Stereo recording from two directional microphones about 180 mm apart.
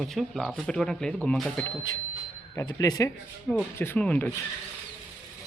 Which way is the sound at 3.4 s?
5° left (ahead or behind).